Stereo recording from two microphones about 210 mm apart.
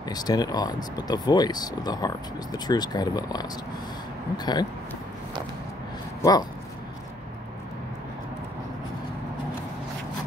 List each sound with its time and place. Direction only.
0.0 s speech: 20° left (ahead or behind)
6.2 s speech: 15° left (ahead or behind)